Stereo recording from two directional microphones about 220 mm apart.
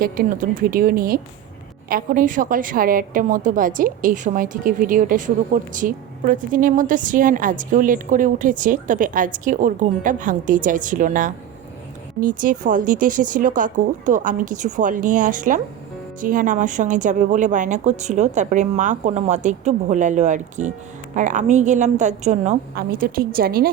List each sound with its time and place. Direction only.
0.0 s a woman's voice: 40° right (ahead or behind)